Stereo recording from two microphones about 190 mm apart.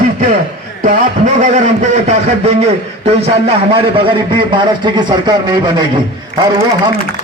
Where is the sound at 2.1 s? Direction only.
35° right (ahead or behind).